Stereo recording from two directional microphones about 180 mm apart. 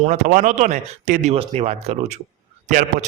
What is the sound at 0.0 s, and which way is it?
A man's voice, 45° right (ahead or behind).